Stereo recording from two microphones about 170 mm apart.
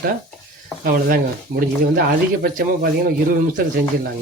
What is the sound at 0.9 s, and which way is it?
Speech, 60° right (ahead or behind).